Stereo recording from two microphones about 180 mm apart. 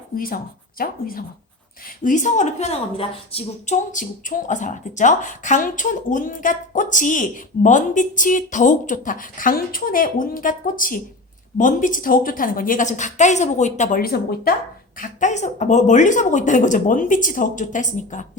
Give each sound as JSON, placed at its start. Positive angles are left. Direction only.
{"t": 0.8, "sound": "a woman's voice", "side_deg": 50}
{"t": 3.9, "sound": "a woman's voice", "side_deg": 45}
{"t": 14.9, "sound": "a woman's voice", "side_deg": 45}